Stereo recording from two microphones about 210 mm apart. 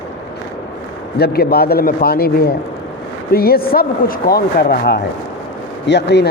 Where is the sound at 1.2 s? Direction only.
50° left (ahead or behind).